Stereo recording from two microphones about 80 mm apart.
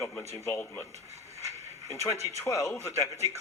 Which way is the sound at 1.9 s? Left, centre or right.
Left.